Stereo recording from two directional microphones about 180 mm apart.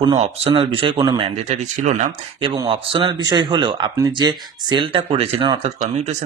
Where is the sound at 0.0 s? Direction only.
30° right (ahead or behind).